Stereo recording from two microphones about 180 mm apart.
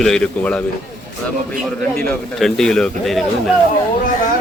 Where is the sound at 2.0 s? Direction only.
5° left (ahead or behind).